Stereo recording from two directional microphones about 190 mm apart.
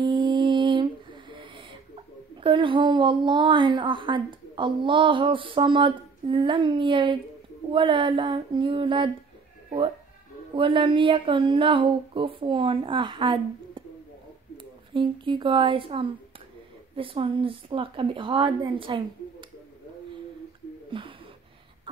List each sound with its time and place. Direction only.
0.0 s lullaby: 25° right (ahead or behind)
2.4 s speech: 25° right (ahead or behind)
10.5 s speech: 25° right (ahead or behind)
20.9 s speech: 25° right (ahead or behind)